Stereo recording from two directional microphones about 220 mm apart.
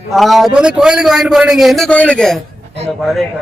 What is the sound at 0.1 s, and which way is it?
A man's voice, centre (ahead or behind).